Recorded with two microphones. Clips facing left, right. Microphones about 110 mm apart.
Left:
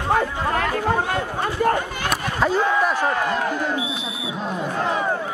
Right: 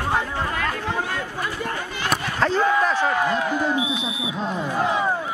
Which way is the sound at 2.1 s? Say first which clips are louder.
Even; 10° left (ahead or behind).